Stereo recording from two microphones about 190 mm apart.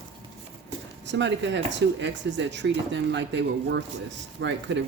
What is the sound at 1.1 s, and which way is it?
Speech, 70° right (ahead or behind).